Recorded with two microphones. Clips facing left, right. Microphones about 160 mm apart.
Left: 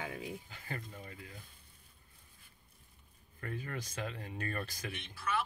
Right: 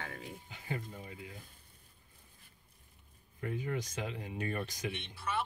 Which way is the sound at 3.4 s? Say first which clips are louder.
Right 5 dB; 15° right (ahead or behind).